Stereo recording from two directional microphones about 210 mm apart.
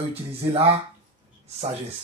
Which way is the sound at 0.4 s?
25° right (ahead or behind).